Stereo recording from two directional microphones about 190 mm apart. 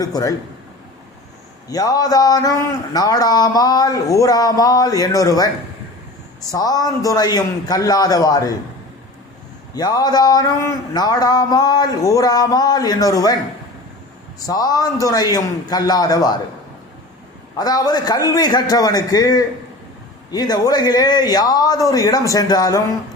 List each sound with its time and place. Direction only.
0.0 s a man's voice: 20° left (ahead or behind)
1.7 s a man's voice: 20° left (ahead or behind)
6.5 s a man's voice: 20° left (ahead or behind)
9.7 s a man's voice: 20° left (ahead or behind)
14.3 s a man's voice: 20° left (ahead or behind)
17.6 s a man's voice: 20° left (ahead or behind)